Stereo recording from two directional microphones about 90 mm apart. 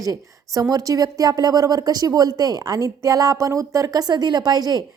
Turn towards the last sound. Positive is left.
turn(degrees=-45)  # may be behind; listen again after turning